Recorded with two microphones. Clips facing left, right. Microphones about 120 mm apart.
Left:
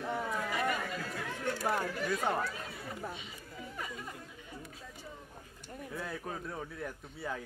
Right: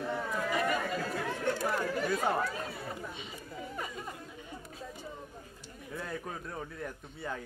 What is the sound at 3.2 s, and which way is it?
Chatter, 30° right (ahead or behind).